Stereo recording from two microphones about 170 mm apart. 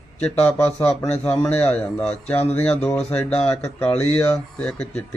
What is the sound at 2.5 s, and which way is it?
Speech, 10° left (ahead or behind).